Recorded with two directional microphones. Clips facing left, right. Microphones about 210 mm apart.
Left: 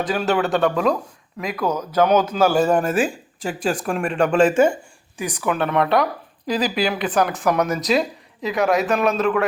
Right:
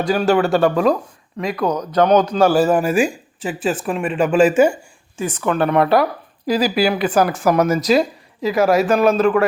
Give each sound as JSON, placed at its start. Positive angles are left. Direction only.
{"t": 0.1, "sound": "speech", "side_deg": 0}
{"t": 2.6, "sound": "speech", "side_deg": -5}
{"t": 5.1, "sound": "speech", "side_deg": 15}